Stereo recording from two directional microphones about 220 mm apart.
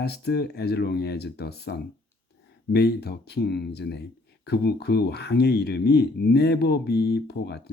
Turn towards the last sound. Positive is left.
turn(degrees=50)  # may be behind; listen again after turning